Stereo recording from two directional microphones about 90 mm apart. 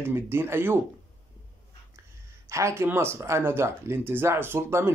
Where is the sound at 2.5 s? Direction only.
35° right (ahead or behind).